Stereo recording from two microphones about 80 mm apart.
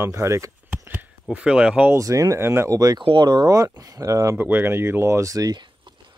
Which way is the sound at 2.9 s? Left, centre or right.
Right.